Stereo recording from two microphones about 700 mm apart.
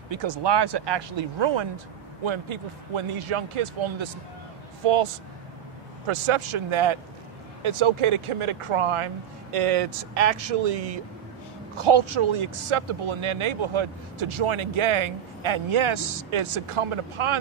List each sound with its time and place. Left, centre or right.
0.1 s speech: right
11.7 s speech: right